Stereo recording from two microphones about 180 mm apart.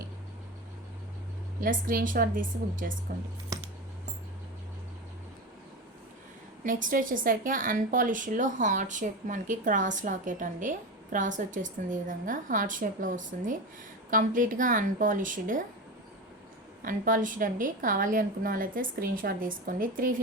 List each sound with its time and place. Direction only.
1.6 s a woman's voice: 50° right (ahead or behind)
6.7 s a woman's voice: 45° right (ahead or behind)
16.8 s a woman's voice: 45° right (ahead or behind)